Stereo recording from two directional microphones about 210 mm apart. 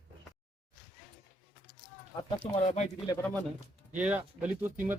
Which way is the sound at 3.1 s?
10° left (ahead or behind).